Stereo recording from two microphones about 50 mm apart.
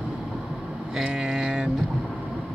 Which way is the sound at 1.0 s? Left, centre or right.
Centre.